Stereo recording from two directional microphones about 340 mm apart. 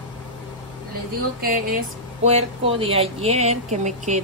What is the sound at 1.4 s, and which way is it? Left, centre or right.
Speech, right.